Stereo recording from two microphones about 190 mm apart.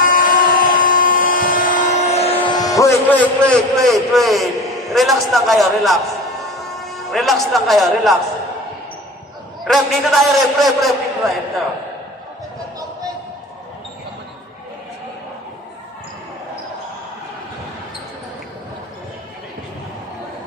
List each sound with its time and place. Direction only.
0.0 s a sound: 45° left (ahead or behind); by 3.9 s 5° left (ahead or behind)
4.1 s a man's voice: centre (ahead or behind)
9.7 s a man's voice: centre (ahead or behind)